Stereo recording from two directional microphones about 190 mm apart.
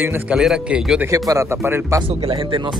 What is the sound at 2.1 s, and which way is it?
Speech, 30° right (ahead or behind).